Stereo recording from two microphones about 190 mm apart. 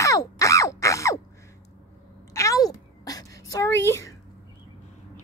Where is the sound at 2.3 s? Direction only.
15° left (ahead or behind).